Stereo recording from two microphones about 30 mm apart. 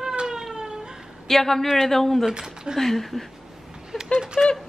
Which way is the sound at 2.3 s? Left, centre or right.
Right.